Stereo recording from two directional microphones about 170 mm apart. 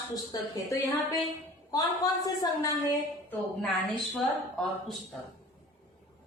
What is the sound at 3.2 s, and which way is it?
A woman's voice, centre (ahead or behind).